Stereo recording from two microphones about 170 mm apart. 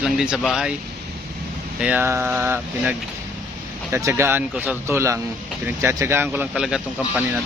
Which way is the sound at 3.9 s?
15° right (ahead or behind).